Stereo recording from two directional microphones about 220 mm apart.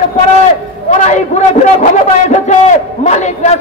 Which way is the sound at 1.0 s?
30° left (ahead or behind).